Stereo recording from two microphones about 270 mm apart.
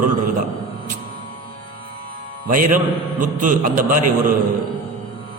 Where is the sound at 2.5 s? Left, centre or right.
Right.